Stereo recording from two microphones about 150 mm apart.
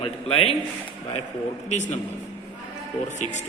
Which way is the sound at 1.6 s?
50° left (ahead or behind).